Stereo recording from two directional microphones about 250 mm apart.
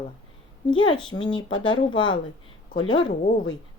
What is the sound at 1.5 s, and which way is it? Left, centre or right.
Speech, left.